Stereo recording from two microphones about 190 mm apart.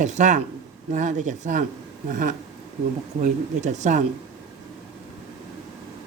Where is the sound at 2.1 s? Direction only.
45° right (ahead or behind).